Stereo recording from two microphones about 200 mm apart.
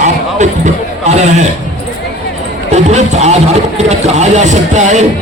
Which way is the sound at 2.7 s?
35° right (ahead or behind).